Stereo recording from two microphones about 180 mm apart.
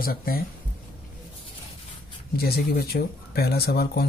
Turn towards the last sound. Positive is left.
turn(degrees=60)  # may be behind; listen again after turning